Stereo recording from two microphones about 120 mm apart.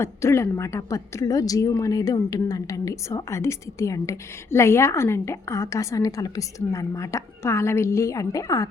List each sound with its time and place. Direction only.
0.0 s a woman's voice: 20° left (ahead or behind)